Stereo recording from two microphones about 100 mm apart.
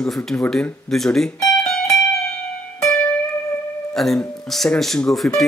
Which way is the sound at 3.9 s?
5° left (ahead or behind).